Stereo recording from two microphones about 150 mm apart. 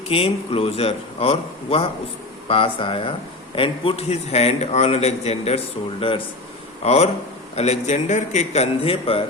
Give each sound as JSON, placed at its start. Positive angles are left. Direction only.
{"t": 0.1, "sound": "a man's voice", "side_deg": 40}